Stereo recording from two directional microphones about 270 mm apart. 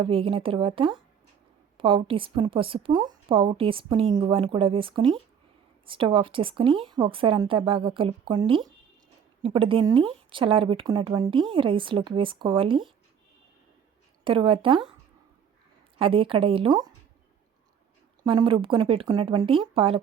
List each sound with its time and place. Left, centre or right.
0.0 s speech: centre
14.3 s speech: centre
16.0 s speech: centre
18.2 s speech: centre